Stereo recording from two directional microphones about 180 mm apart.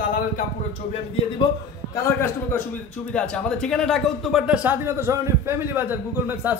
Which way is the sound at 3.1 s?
5° left (ahead or behind).